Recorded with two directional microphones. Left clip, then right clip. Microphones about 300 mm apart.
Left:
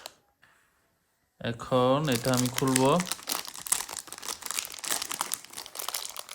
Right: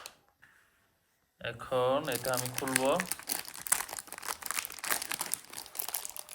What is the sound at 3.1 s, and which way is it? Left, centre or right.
Crumpling, centre.